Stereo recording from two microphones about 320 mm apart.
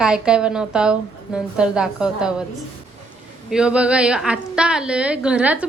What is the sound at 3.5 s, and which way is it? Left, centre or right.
A woman's voice, centre.